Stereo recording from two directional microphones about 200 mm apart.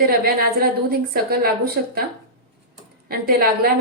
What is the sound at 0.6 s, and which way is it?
Speech, 50° right (ahead or behind).